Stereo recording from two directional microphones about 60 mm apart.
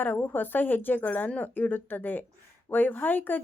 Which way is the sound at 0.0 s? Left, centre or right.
Left.